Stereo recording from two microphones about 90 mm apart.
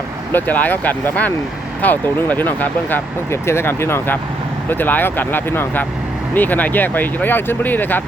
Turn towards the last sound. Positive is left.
turn(degrees=20)  # may be behind; listen again after turning